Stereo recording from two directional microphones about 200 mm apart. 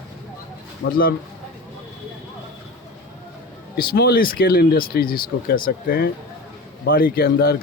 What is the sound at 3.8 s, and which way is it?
Speech, 50° left (ahead or behind).